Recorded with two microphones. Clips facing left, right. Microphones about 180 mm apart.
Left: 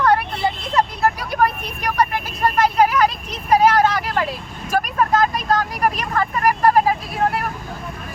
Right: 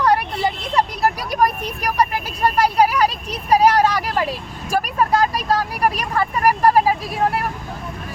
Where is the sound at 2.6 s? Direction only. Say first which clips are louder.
Left 1 dB; 35° right (ahead or behind).